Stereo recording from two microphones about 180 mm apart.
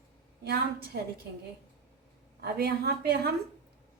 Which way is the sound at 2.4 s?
60° right (ahead or behind).